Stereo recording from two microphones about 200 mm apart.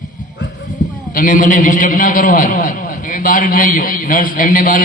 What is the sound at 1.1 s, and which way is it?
A man's voice, 40° left (ahead or behind).